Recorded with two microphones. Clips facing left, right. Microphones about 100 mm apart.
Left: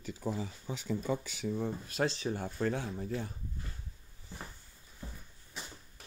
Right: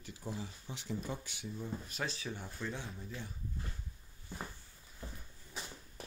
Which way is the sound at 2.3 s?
50° left (ahead or behind).